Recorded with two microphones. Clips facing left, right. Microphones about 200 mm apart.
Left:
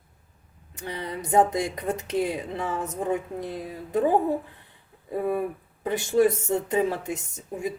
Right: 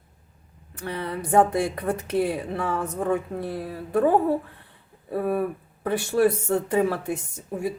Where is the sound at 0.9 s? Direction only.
15° left (ahead or behind).